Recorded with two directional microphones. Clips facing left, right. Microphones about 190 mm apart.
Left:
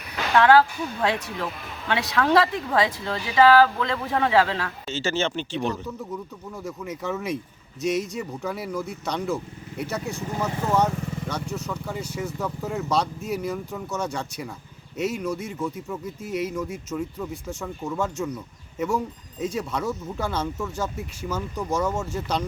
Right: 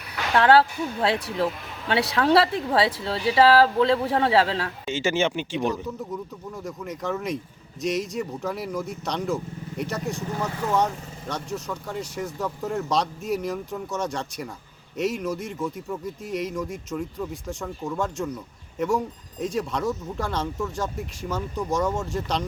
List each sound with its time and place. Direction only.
0.3 s a woman's voice: 30° right (ahead or behind)
1.9 s a woman's voice: 35° right (ahead or behind)
4.9 s speech: 15° right (ahead or behind)
6.7 s speech: 5° left (ahead or behind)
11.3 s speech: centre (ahead or behind)